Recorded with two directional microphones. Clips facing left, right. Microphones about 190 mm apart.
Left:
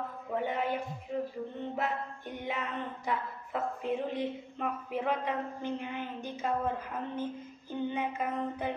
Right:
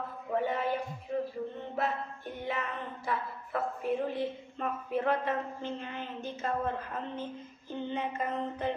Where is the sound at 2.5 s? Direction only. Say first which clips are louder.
Even; 15° left (ahead or behind).